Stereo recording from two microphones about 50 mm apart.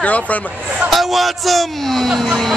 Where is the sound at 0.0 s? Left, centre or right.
Left.